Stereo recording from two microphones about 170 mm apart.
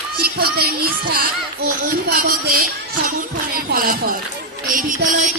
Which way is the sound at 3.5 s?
60° right (ahead or behind).